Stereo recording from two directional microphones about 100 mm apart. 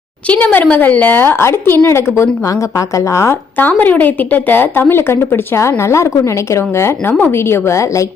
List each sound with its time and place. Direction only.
0.3 s a woman's voice: 15° left (ahead or behind)
3.6 s a woman's voice: 15° left (ahead or behind)